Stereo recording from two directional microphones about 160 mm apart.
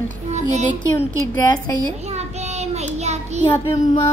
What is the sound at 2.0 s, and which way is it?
Child singing, 45° right (ahead or behind).